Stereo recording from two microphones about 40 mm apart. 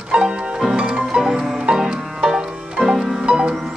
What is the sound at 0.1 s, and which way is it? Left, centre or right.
Music, right.